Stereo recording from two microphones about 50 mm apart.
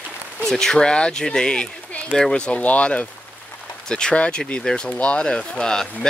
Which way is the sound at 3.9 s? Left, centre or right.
Centre.